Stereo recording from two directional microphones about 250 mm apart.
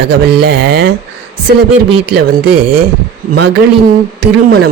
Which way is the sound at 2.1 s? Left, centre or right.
Right.